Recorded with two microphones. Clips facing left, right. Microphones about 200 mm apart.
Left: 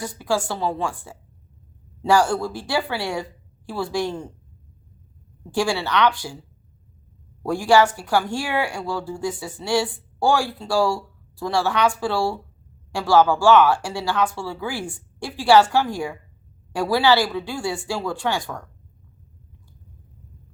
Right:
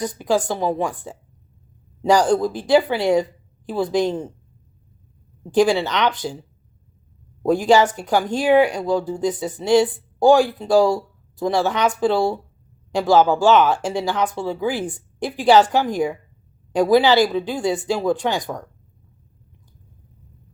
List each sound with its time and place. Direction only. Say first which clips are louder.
0.0 s speech: right 4 dB; 20° right (ahead or behind)
5.5 s speech: right 6 dB; 20° right (ahead or behind)
7.4 s speech: right 2 dB; 20° right (ahead or behind)